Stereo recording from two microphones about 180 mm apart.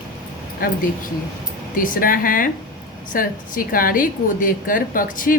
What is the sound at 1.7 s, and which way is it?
A woman's voice, 50° left (ahead or behind).